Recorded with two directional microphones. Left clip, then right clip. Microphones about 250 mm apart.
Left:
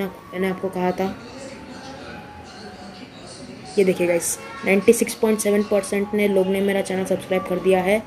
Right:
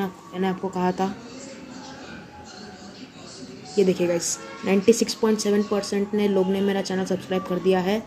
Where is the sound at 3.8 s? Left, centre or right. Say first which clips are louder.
Left 3 dB; centre.